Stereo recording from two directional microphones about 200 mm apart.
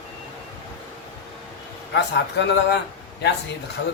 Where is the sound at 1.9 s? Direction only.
60° left (ahead or behind).